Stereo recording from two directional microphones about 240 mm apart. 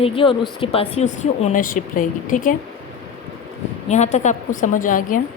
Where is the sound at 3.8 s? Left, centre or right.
Left.